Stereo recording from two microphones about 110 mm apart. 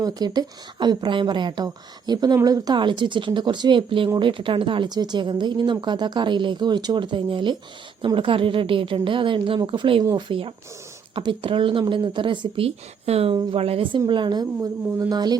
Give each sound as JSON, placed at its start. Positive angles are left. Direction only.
{"t": 0.0, "sound": "a woman's voice", "side_deg": -35}
{"t": 10.0, "sound": "speech", "side_deg": -35}
{"t": 10.2, "sound": "speech", "side_deg": -50}
{"t": 13.3, "sound": "speech", "side_deg": -45}
{"t": 13.6, "sound": "a woman's voice", "side_deg": -60}
{"t": 14.1, "sound": "speech", "side_deg": -45}